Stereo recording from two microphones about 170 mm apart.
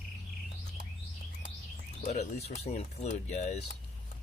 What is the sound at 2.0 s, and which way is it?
Speech, 40° left (ahead or behind).